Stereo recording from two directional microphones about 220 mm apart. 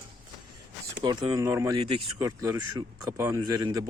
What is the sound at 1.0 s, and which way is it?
Speech, 20° right (ahead or behind).